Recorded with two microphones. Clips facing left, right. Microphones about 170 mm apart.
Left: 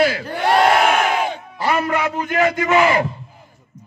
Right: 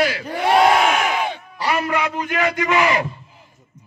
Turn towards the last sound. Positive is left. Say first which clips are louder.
# left 3 dB
turn(degrees=30)  # may be behind; listen again after turning